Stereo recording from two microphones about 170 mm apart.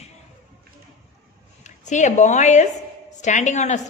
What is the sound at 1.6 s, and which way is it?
A woman's voice, 45° left (ahead or behind).